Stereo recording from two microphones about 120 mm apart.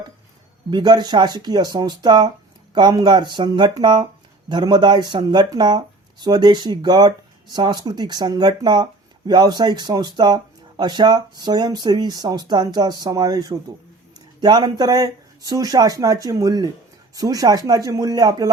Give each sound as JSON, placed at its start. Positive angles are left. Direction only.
{"t": 0.7, "sound": "speech", "side_deg": -35}